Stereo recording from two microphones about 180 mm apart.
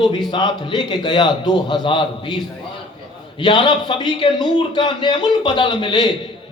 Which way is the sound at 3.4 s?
25° left (ahead or behind).